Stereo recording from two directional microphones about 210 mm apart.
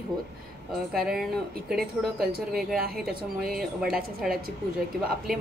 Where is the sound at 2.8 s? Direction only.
45° right (ahead or behind).